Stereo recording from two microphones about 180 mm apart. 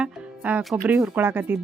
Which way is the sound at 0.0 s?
5° right (ahead or behind).